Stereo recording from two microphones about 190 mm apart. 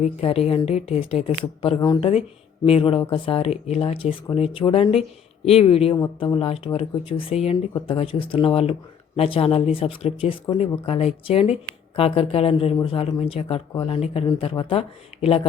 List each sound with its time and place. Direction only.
0.0 s a woman's voice: 30° left (ahead or behind)